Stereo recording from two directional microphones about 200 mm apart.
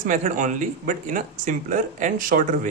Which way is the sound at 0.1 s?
40° right (ahead or behind).